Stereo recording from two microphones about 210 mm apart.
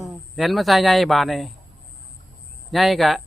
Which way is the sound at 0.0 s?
Centre (ahead or behind).